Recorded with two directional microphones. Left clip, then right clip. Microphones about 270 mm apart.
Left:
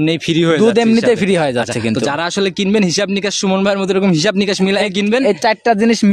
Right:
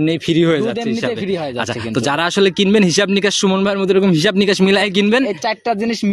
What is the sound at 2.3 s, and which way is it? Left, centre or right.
Speech, centre.